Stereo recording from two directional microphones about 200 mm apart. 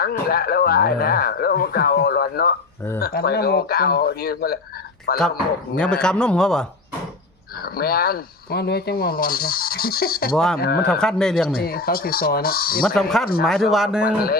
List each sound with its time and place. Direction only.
0.0 s speech: 50° left (ahead or behind)
5.7 s a man's voice: 5° left (ahead or behind)
7.6 s speech: 50° left (ahead or behind)
10.3 s a man's voice: 5° left (ahead or behind)
10.6 s speech: 50° left (ahead or behind)
10.8 s a man's voice: 5° left (ahead or behind)
11.6 s speech: 50° left (ahead or behind)
13.0 s a man's voice: centre (ahead or behind)
14.0 s speech: 50° left (ahead or behind)